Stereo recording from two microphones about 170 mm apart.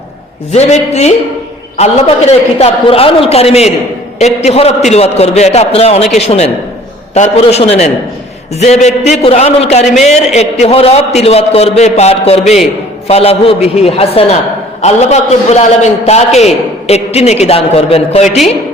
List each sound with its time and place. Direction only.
0.5 s a man's voice: 40° left (ahead or behind)
9.8 s a man's voice: centre (ahead or behind)
10.3 s a man's voice: 40° left (ahead or behind)